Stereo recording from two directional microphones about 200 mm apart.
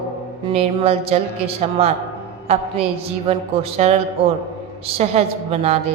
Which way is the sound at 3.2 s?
30° right (ahead or behind).